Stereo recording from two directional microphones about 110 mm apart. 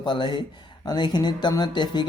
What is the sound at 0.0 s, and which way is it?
Speech, 45° left (ahead or behind).